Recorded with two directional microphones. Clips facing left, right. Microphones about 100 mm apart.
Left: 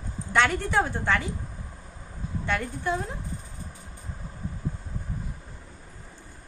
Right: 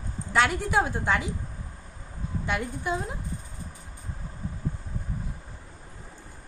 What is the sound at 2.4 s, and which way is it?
Speech, 15° right (ahead or behind).